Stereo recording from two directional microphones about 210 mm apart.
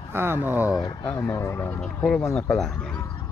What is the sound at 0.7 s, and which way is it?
Speech, 15° left (ahead or behind).